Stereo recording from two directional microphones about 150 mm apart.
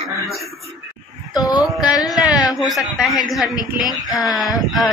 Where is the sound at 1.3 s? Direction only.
25° left (ahead or behind).